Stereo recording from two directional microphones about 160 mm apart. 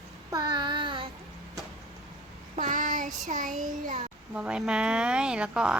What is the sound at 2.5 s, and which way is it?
Child singing, 50° right (ahead or behind).